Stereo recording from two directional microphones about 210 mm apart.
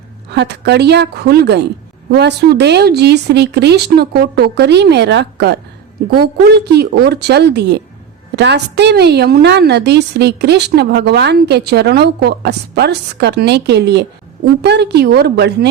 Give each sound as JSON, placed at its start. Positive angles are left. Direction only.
{"t": 0.3, "sound": "a woman's voice", "side_deg": -50}